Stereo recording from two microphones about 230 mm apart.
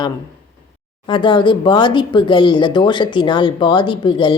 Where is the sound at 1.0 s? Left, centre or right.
Left.